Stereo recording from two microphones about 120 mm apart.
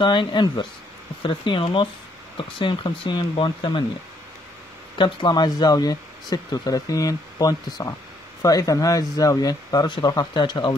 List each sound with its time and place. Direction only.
0.0 s speech: 40° left (ahead or behind)
4.9 s speech: 40° left (ahead or behind)